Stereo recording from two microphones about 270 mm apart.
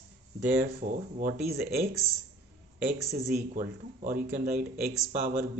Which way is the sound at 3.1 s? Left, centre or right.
Right.